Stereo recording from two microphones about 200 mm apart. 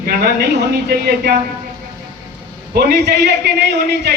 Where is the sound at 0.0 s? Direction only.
50° right (ahead or behind).